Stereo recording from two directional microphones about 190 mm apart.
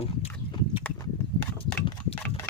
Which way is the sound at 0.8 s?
15° left (ahead or behind).